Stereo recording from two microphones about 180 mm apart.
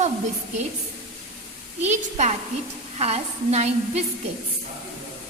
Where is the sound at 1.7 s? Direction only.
40° right (ahead or behind).